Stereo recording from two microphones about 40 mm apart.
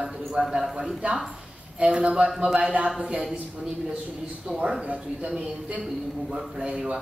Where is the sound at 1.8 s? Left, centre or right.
Right.